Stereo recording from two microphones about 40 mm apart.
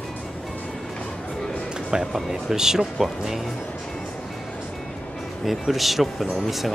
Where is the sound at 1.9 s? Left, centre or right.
Centre.